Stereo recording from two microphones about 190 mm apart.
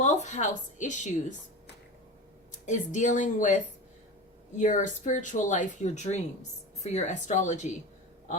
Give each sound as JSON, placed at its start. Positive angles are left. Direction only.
{"t": 0.0, "sound": "a woman's voice", "side_deg": 40}
{"t": 2.6, "sound": "speech", "side_deg": 40}